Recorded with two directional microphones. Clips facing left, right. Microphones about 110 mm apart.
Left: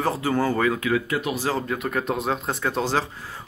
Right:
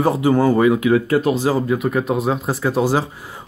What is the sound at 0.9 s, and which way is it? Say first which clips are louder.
Speech: right 8 dB; 35° right (ahead or behind).